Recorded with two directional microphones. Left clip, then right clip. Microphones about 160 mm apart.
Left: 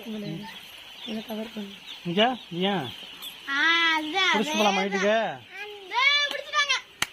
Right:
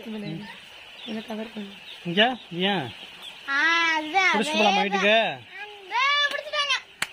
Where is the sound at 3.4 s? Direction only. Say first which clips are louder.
Right 1 dB; 45° right (ahead or behind).